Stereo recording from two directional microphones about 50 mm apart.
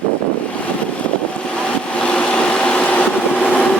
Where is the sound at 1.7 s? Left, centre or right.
Left.